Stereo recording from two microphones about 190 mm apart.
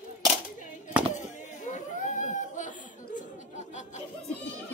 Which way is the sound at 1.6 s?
40° left (ahead or behind).